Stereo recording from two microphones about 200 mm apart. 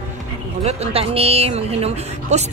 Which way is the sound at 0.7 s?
30° right (ahead or behind).